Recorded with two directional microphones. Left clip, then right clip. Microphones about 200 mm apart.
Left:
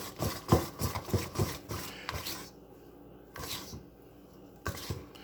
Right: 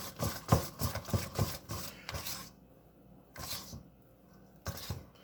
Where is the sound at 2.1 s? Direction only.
15° right (ahead or behind).